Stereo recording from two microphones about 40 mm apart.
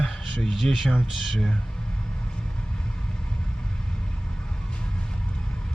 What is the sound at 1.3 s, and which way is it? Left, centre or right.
Speech, centre.